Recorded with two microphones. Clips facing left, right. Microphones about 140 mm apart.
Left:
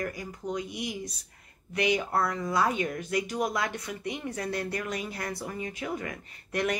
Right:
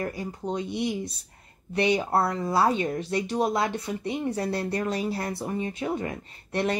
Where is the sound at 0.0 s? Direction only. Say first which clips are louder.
Right 3 dB; 30° right (ahead or behind).